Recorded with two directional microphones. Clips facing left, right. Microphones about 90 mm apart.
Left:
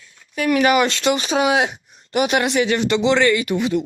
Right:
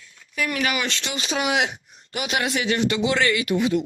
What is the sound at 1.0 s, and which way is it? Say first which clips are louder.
Speech: left 8 dB; 40° left (ahead or behind).